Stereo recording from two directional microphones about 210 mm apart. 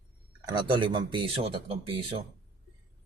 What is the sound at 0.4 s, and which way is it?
Speech, 20° right (ahead or behind).